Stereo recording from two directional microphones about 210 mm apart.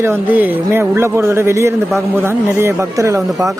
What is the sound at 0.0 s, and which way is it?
Speech, 10° right (ahead or behind).